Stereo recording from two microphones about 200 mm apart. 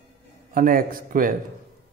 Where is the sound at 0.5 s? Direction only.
45° right (ahead or behind).